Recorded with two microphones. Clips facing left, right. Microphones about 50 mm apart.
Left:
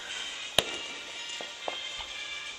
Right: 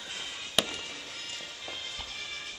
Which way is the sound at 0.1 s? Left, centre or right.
Centre.